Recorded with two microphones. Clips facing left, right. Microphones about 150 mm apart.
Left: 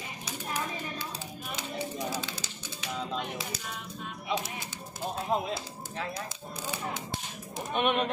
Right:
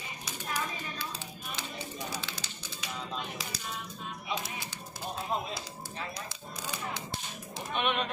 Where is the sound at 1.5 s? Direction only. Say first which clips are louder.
Left 5 dB; 55° left (ahead or behind).